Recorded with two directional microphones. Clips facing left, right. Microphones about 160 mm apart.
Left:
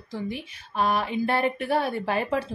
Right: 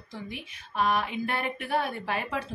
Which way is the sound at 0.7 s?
35° left (ahead or behind).